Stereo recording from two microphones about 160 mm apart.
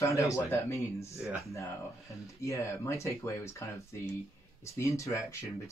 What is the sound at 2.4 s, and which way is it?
Speech, 20° left (ahead or behind).